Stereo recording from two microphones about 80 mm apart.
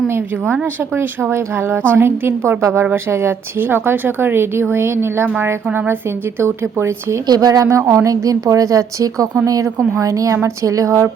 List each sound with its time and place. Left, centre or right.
0.9 s speech: right
7.3 s a woman's voice: right